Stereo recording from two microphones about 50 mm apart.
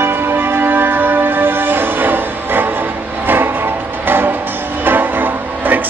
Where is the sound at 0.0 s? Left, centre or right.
Right.